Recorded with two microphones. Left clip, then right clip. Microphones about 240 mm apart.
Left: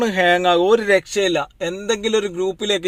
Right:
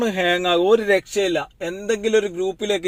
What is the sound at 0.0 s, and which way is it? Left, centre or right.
Speech, centre.